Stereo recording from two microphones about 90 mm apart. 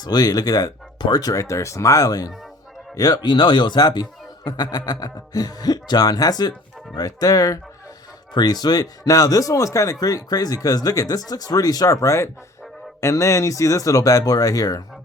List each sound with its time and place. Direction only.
0.0 s speech: 45° left (ahead or behind)